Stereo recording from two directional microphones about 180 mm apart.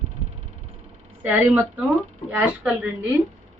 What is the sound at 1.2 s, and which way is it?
Speech, 10° right (ahead or behind).